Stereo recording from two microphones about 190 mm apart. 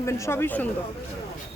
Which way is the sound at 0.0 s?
15° left (ahead or behind).